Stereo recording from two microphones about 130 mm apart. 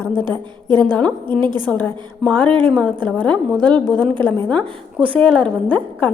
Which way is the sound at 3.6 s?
35° right (ahead or behind).